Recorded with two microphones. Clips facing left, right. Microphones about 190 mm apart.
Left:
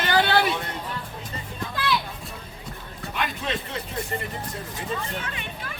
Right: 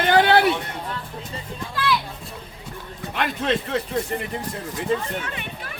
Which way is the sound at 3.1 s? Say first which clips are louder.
Right 6 dB; 65° right (ahead or behind).